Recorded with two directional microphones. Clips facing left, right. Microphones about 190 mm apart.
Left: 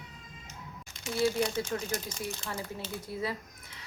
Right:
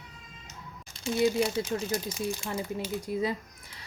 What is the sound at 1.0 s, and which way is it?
Speech, 30° right (ahead or behind).